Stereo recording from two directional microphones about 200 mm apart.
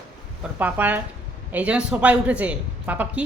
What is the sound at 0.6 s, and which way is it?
Speech, 10° right (ahead or behind).